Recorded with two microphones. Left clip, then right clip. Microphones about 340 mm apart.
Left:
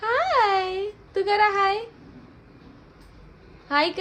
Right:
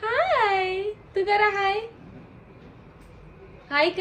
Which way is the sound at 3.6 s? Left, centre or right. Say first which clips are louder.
Even; centre.